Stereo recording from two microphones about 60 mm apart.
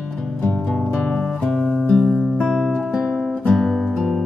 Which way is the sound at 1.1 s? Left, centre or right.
Centre.